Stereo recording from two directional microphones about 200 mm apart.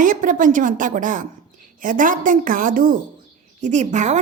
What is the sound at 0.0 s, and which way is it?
A woman's voice, 40° right (ahead or behind).